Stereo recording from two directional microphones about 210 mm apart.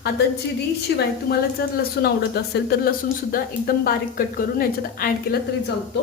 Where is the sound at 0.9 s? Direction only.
55° left (ahead or behind).